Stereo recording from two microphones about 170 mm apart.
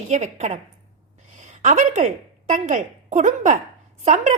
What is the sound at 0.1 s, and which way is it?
A woman's voice, 45° right (ahead or behind).